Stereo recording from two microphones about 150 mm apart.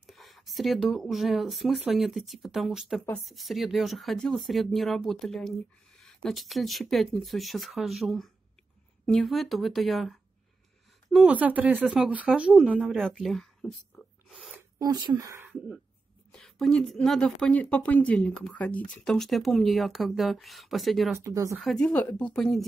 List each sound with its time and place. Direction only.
0.0 s speech: centre (ahead or behind)
11.2 s speech: 10° right (ahead or behind)
12.7 s rub: centre (ahead or behind)
14.8 s speech: 25° right (ahead or behind)
16.3 s speech: centre (ahead or behind)
21.2 s speech: 20° right (ahead or behind)
21.5 s speech: centre (ahead or behind)